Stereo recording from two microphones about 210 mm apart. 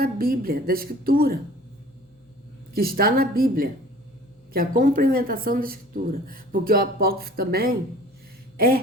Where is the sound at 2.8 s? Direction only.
45° right (ahead or behind).